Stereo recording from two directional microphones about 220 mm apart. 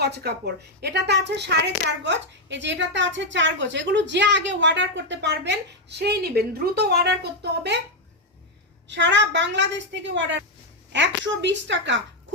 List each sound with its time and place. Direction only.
0.0 s a woman's voice: 50° right (ahead or behind)
8.9 s a woman's voice: 55° right (ahead or behind)